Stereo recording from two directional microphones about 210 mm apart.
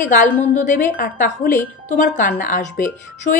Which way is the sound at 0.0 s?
40° left (ahead or behind).